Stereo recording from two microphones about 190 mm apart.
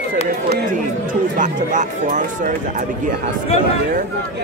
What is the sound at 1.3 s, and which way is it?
Speech, 40° right (ahead or behind).